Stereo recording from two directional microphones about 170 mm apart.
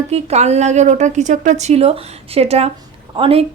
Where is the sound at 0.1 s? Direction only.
40° right (ahead or behind).